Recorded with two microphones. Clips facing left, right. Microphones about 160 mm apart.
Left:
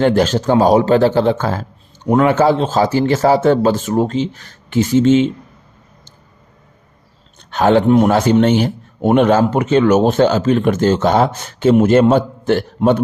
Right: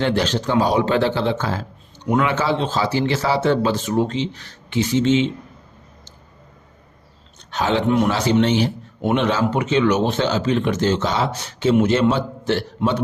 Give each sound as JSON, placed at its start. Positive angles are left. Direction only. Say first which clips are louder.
{"t": 0.0, "sound": "a man's voice", "louder": "left 7 dB", "side_deg": 45}
{"t": 7.5, "sound": "a man's voice", "louder": "left 8 dB", "side_deg": 55}
{"t": 7.9, "sound": "a man's voice", "louder": "left 6 dB", "side_deg": 45}